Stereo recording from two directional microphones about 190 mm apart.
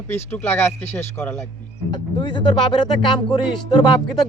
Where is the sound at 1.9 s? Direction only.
25° left (ahead or behind).